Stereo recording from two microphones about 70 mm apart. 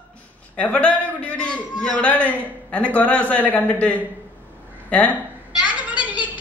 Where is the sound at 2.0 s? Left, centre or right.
Centre.